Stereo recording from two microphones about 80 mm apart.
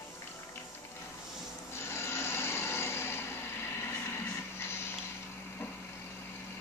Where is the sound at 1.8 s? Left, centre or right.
Left.